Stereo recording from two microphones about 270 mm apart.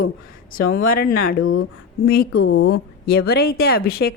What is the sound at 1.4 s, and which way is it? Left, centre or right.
Speech, left.